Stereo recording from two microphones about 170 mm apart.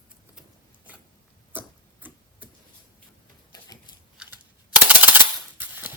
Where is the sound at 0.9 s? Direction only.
10° right (ahead or behind).